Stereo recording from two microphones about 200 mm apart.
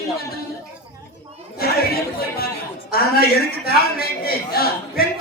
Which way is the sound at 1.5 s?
50° left (ahead or behind).